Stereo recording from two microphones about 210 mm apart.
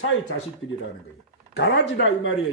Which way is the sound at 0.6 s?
75° left (ahead or behind).